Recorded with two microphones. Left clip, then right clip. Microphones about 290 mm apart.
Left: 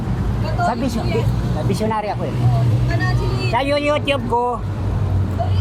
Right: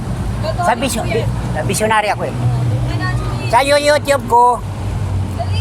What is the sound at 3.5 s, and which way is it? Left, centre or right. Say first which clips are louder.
Speech: right 7 dB; right.